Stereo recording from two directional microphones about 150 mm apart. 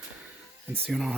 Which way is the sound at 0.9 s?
Centre (ahead or behind).